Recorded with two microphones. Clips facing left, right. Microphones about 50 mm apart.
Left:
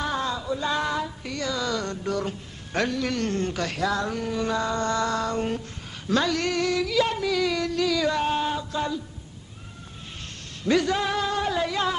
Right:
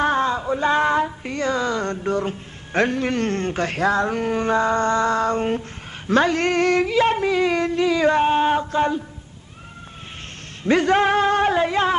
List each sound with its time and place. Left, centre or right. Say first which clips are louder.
0.0 s music: right 8 dB; right
6.0 s female singing: right 6 dB; right
10.6 s speech: right 6 dB; right